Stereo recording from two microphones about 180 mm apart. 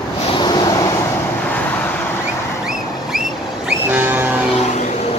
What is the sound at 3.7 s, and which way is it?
Vehicle, 10° right (ahead or behind).